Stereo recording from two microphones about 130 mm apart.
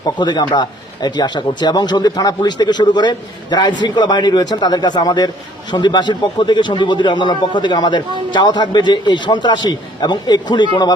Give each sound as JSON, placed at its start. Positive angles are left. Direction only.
{"t": 0.0, "sound": "speech", "side_deg": 35}